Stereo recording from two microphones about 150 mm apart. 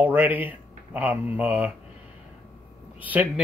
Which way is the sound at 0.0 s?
10° right (ahead or behind).